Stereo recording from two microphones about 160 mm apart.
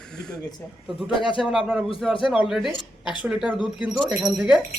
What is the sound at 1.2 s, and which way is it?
Speech, 30° left (ahead or behind).